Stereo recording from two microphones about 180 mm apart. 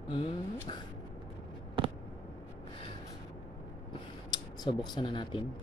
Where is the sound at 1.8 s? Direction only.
30° right (ahead or behind).